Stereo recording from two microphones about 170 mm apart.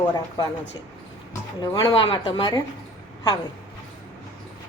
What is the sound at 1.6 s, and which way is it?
Speech, 25° left (ahead or behind).